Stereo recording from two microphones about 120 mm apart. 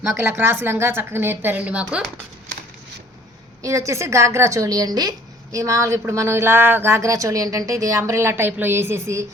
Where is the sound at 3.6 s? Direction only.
25° right (ahead or behind).